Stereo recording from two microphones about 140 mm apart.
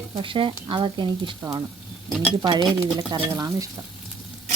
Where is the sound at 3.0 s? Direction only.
30° right (ahead or behind).